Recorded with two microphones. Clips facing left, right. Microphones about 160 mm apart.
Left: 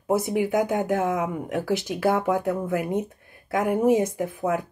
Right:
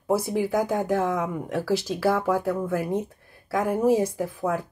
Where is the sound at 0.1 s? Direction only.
20° left (ahead or behind).